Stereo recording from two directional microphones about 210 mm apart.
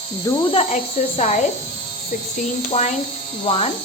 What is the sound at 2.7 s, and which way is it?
Speech, 30° left (ahead or behind).